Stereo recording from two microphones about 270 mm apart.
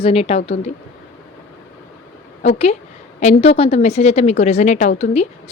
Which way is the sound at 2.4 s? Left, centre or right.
Left.